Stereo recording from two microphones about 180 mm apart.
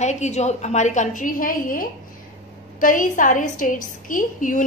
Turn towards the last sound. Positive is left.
turn(degrees=45)  # may be behind; listen again after turning